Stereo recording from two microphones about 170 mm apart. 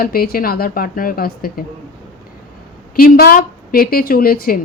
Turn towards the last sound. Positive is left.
turn(degrees=60)  # may be behind; listen again after turning